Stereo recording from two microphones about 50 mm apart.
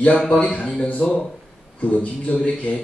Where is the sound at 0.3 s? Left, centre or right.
Left.